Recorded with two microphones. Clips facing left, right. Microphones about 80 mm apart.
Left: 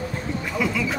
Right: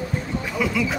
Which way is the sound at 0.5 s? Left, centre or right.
Centre.